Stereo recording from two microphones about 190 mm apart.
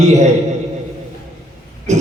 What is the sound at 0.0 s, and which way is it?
Speech, 40° right (ahead or behind).